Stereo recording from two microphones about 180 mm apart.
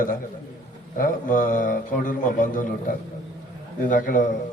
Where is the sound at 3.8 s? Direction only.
45° left (ahead or behind).